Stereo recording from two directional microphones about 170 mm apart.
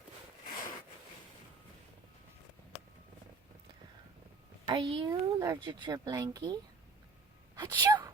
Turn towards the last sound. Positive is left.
turn(degrees=-25)  # may be behind; listen again after turning